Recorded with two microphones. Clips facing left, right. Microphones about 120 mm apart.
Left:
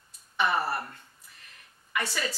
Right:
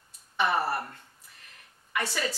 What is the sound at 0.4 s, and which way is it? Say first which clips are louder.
Speech: right 1 dB; 40° right (ahead or behind).